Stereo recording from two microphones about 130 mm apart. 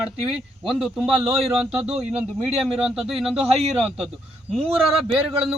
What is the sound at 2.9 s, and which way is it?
Speech, 5° right (ahead or behind).